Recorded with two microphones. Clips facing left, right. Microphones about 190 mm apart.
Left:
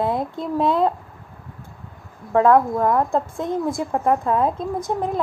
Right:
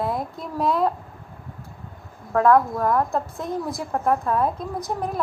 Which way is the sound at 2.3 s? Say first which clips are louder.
Left 2 dB; 20° left (ahead or behind).